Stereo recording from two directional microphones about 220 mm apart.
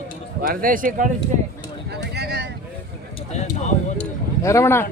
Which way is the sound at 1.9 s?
50° right (ahead or behind).